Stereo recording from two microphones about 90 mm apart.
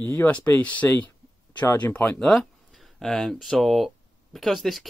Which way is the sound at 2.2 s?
10° left (ahead or behind).